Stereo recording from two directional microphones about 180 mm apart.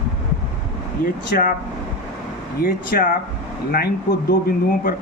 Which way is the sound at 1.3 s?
50° left (ahead or behind).